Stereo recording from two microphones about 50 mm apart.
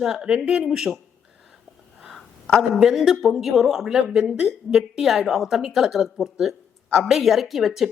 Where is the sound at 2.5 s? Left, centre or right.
Centre.